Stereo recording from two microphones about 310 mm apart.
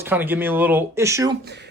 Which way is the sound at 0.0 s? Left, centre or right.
Centre.